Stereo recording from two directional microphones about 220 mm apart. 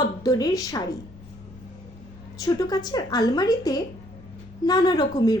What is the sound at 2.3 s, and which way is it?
A woman's voice, 15° left (ahead or behind).